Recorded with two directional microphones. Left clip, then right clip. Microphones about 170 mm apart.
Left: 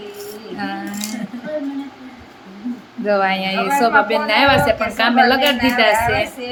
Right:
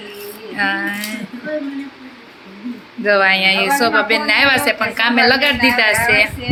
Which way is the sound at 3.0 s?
5° left (ahead or behind).